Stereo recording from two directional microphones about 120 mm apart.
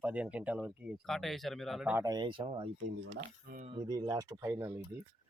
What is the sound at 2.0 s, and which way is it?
Speech, 35° right (ahead or behind).